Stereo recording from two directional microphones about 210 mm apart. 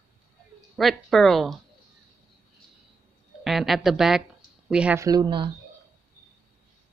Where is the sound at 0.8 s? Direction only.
Centre (ahead or behind).